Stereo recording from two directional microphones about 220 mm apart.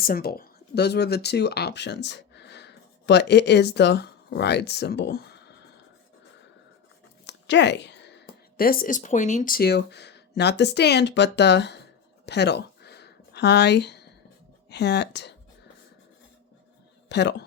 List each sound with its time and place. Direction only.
0.0 s speech: 40° left (ahead or behind)
7.3 s a woman's voice: 55° left (ahead or behind)
12.2 s a sound: 50° left (ahead or behind)
14.7 s speech: 50° left (ahead or behind)
17.1 s speech: 50° left (ahead or behind)